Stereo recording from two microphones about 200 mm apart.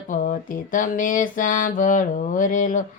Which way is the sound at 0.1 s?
40° left (ahead or behind).